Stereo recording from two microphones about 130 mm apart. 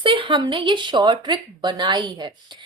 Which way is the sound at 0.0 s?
40° right (ahead or behind).